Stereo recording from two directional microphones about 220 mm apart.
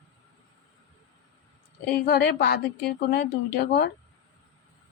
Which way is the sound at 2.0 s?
45° left (ahead or behind).